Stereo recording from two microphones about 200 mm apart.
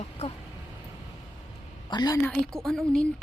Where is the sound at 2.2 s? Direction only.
5° left (ahead or behind).